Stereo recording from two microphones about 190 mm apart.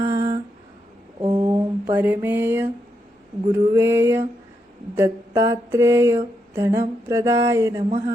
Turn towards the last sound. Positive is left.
turn(degrees=-15)  # may be behind; listen again after turning